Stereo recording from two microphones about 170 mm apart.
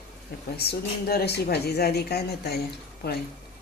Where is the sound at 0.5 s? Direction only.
70° left (ahead or behind).